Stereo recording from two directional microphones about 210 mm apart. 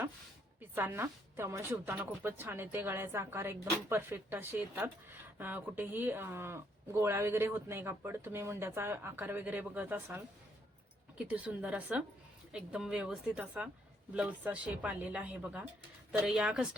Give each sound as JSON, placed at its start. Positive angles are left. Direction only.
{"t": 0.8, "sound": "a woman's voice", "side_deg": -10}
{"t": 11.3, "sound": "a woman's voice", "side_deg": -5}